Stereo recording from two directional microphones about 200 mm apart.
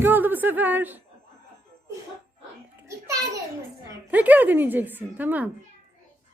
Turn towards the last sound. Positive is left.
turn(degrees=-10)  # may be behind; listen again after turning